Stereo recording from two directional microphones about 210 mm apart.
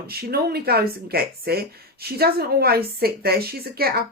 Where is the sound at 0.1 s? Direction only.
45° right (ahead or behind).